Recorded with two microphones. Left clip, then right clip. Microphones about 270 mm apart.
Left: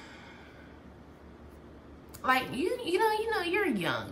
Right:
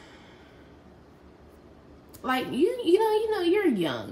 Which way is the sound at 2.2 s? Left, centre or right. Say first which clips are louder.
Right 2 dB; left.